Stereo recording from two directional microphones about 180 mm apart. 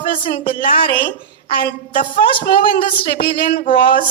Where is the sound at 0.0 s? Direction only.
50° left (ahead or behind).